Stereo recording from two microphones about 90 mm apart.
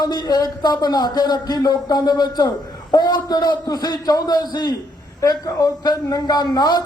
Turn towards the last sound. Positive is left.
turn(degrees=50)  # may be behind; listen again after turning